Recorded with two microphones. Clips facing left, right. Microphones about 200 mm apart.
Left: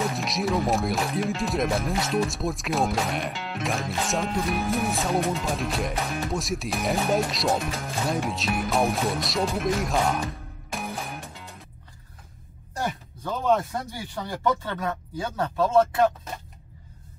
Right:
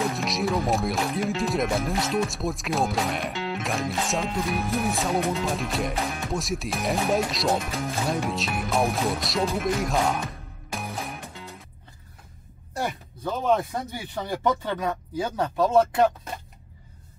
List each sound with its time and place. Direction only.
0.1 s speech: centre (ahead or behind)
12.7 s a sound: 10° right (ahead or behind)
13.9 s speech: 20° right (ahead or behind)